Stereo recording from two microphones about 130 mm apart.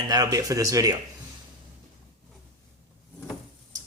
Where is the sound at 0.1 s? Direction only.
25° right (ahead or behind).